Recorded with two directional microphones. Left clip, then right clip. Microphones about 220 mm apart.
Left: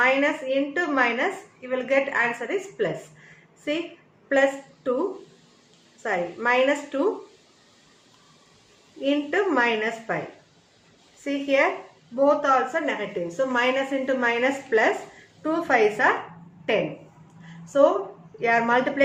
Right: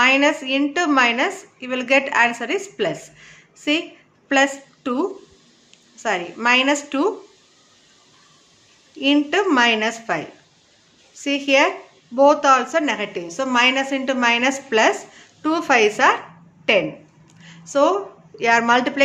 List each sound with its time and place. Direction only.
0.0 s a woman's voice: 45° right (ahead or behind)
4.3 s a woman's voice: 45° right (ahead or behind)
6.0 s a woman's voice: 45° right (ahead or behind)
9.0 s a woman's voice: 45° right (ahead or behind)
11.2 s a woman's voice: 45° right (ahead or behind)
17.7 s a woman's voice: 40° right (ahead or behind)